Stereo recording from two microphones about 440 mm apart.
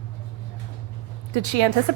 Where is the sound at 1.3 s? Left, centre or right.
Right.